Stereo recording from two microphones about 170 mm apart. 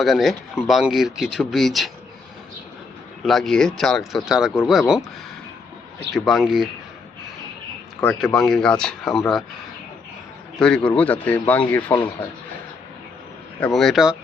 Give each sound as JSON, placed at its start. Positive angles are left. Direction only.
{"t": 0.0, "sound": "speech", "side_deg": 0}
{"t": 3.2, "sound": "speech", "side_deg": 0}
{"t": 6.1, "sound": "speech", "side_deg": 0}
{"t": 8.0, "sound": "speech", "side_deg": 0}
{"t": 10.6, "sound": "a man's voice", "side_deg": 5}
{"t": 13.6, "sound": "speech", "side_deg": 0}